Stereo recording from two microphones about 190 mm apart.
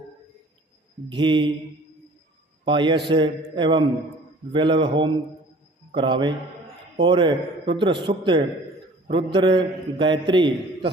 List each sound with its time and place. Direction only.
1.1 s a man's voice: 25° right (ahead or behind)
2.6 s a man's voice: 25° right (ahead or behind)